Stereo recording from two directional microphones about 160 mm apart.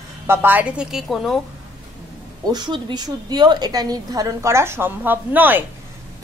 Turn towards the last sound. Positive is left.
turn(degrees=-10)  # may be behind; listen again after turning